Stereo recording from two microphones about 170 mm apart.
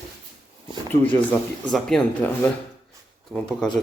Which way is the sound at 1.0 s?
5° left (ahead or behind).